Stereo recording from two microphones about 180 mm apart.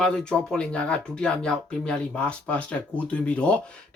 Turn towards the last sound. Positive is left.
turn(degrees=5)  # may be behind; listen again after turning